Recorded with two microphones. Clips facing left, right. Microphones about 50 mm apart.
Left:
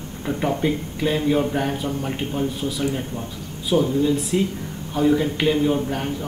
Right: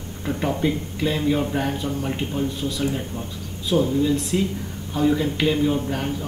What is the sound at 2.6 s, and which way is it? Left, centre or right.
A man's voice, centre.